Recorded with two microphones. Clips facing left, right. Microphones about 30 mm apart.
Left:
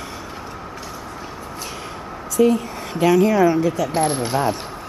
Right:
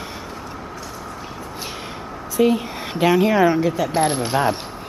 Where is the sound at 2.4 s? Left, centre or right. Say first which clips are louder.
Left 1 dB; right.